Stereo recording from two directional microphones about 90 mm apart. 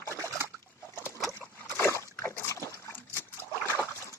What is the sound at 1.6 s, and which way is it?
Splash, 30° left (ahead or behind).